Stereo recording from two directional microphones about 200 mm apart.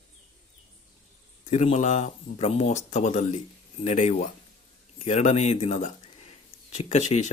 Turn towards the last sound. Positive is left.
turn(degrees=35)  # may be behind; listen again after turning